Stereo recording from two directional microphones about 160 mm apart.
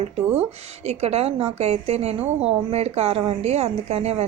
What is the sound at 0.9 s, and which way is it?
A woman's voice, 40° right (ahead or behind).